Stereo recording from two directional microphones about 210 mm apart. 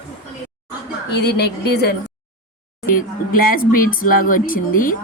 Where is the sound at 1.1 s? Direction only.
50° left (ahead or behind).